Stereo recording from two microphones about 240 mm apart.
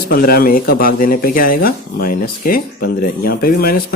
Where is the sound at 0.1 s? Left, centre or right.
Left.